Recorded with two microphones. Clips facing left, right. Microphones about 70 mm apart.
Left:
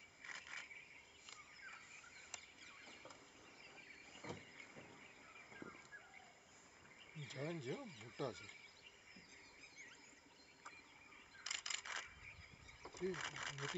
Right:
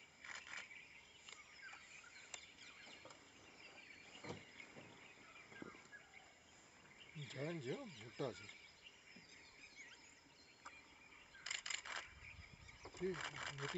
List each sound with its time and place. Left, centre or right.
0.3 s wild animals: centre
2.3 s chicken: centre
3.7 s a sound: centre
7.2 s speech: centre
11.4 s a sound: centre
12.8 s speech: centre